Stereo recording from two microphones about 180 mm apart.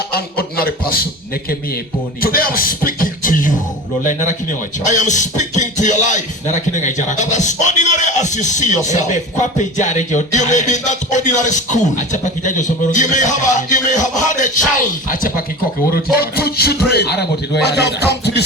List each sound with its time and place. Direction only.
0.1 s a sound: 55° left (ahead or behind)
2.2 s beatboxing: 55° left (ahead or behind)
4.9 s a man's voice: 40° left (ahead or behind); by 18.4 s 65° left (ahead or behind)